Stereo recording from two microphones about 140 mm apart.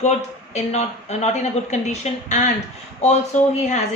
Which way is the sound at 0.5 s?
50° left (ahead or behind).